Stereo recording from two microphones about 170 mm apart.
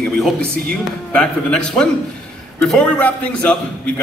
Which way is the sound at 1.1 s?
5° left (ahead or behind).